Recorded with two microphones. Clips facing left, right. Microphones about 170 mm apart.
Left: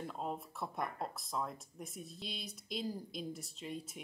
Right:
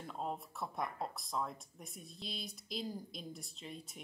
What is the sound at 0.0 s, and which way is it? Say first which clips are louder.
Speech: left 1 dB; centre (ahead or behind).